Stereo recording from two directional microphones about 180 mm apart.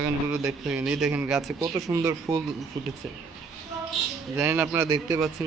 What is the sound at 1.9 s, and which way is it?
Speech, 20° right (ahead or behind).